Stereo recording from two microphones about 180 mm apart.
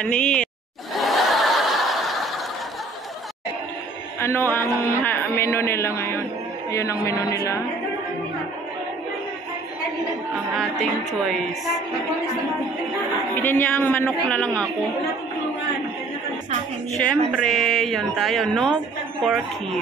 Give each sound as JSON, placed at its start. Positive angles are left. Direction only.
{"t": 0.0, "sound": "a woman's voice", "side_deg": 5}
{"t": 0.9, "sound": "snicker", "side_deg": 0}
{"t": 4.2, "sound": "a man's voice", "side_deg": 15}
{"t": 10.3, "sound": "a woman's voice", "side_deg": 0}
{"t": 13.4, "sound": "a man's voice", "side_deg": 10}
{"t": 17.0, "sound": "a woman's voice", "side_deg": 0}